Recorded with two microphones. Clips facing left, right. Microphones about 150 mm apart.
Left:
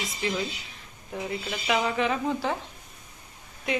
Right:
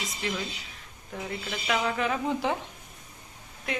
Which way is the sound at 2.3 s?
15° right (ahead or behind).